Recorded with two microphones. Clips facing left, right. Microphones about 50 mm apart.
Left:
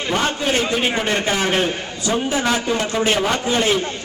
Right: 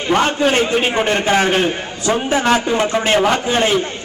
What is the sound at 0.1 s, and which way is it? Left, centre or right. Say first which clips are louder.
A man's voice: right 6 dB; right.